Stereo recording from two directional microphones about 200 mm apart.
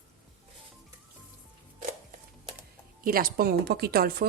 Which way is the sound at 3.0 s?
45° right (ahead or behind).